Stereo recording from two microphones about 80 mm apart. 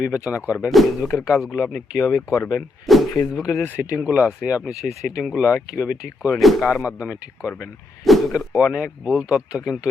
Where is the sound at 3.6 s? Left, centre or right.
Left.